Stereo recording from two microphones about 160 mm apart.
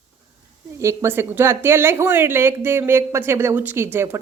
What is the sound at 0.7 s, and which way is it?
Speech, 15° right (ahead or behind).